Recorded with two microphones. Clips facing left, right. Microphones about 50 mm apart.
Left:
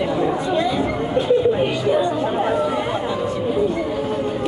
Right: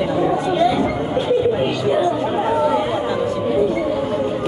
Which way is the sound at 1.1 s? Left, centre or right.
Right.